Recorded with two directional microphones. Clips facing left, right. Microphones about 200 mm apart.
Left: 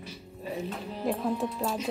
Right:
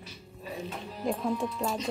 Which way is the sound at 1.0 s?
Centre (ahead or behind).